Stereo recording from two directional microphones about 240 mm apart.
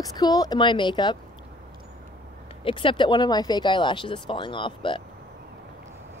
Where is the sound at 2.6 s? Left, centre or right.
Left.